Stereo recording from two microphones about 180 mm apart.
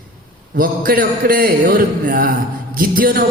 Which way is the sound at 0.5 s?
55° right (ahead or behind).